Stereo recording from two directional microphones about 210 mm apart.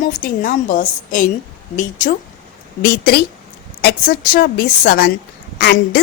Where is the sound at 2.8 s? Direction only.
50° left (ahead or behind).